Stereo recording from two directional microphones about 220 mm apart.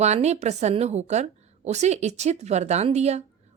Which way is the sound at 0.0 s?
30° right (ahead or behind).